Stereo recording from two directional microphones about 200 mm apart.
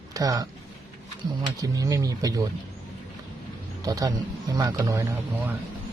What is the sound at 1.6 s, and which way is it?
Speech, 20° right (ahead or behind).